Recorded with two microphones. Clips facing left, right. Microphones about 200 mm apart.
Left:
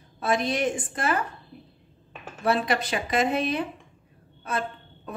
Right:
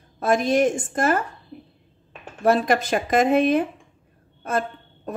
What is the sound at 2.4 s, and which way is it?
A woman's voice, 45° right (ahead or behind).